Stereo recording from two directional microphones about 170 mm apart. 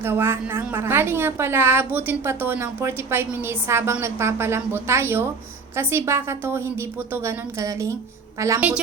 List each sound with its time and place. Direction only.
0.0 s a woman's voice: 15° right (ahead or behind)